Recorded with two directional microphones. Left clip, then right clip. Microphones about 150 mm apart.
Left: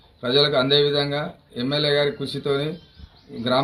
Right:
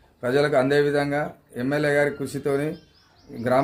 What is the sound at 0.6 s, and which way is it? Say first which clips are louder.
A man's voice: left 1 dB; 50° right (ahead or behind).